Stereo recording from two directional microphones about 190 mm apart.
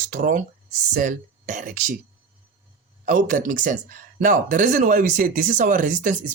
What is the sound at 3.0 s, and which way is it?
Speech, 45° right (ahead or behind).